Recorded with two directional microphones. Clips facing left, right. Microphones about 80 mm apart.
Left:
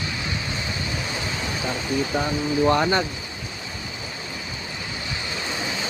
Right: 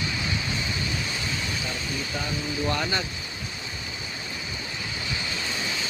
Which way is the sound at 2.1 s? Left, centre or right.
Left.